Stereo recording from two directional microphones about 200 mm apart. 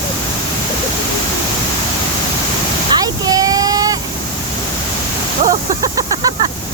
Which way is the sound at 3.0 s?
20° right (ahead or behind).